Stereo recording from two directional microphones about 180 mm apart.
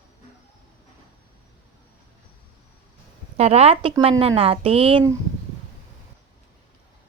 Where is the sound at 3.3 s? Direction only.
35° right (ahead or behind).